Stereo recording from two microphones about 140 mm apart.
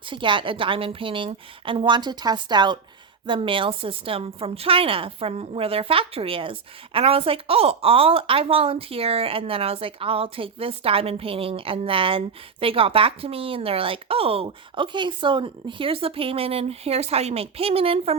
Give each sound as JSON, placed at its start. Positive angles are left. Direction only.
{"t": 0.1, "sound": "a woman's voice", "side_deg": -35}